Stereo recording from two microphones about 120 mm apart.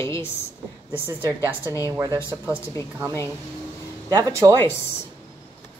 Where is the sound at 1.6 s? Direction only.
25° left (ahead or behind).